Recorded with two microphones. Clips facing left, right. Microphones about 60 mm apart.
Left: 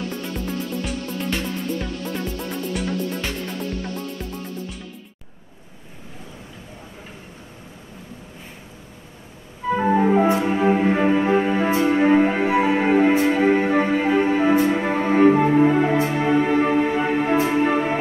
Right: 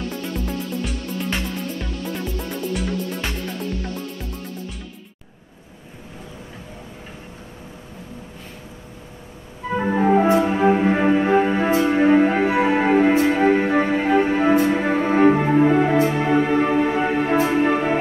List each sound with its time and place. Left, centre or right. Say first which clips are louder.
0.2 s music: right 1 dB; centre
9.8 s organ: even; centre
10.2 s music: right 2 dB; centre